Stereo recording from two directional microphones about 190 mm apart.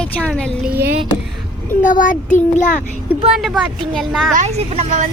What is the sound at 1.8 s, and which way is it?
A child's voice, 45° left (ahead or behind).